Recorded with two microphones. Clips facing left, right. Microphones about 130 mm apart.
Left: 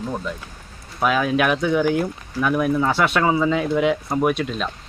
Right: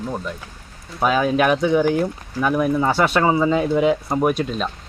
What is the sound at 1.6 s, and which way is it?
Speech, 5° right (ahead or behind).